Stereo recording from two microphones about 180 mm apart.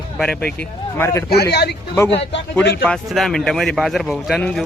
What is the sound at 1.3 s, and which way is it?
Speech, 65° left (ahead or behind).